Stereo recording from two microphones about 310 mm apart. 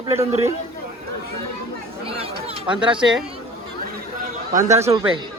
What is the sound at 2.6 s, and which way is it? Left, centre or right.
Speech, centre.